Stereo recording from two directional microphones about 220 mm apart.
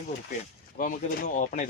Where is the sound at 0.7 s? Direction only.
35° left (ahead or behind).